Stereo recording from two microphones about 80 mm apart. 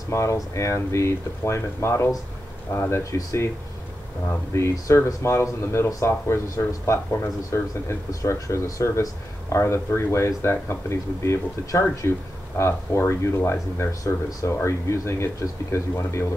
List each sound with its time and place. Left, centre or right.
0.1 s speech: left
4.6 s speech: left